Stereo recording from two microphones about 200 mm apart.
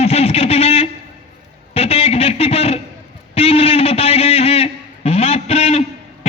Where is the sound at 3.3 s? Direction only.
30° left (ahead or behind).